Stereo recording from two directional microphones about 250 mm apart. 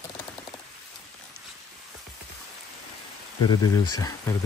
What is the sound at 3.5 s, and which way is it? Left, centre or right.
Speech, centre.